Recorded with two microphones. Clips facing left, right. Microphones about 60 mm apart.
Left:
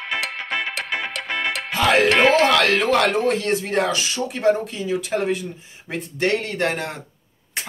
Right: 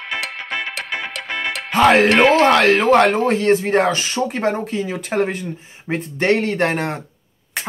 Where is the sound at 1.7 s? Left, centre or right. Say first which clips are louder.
Right 5 dB; right.